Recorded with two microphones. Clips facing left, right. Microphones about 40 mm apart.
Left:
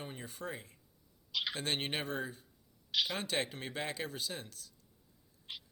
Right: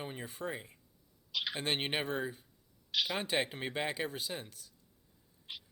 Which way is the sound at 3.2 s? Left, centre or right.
Centre.